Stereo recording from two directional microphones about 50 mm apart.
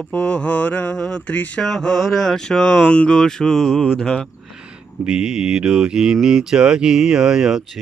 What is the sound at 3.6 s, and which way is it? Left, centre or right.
Speech, centre.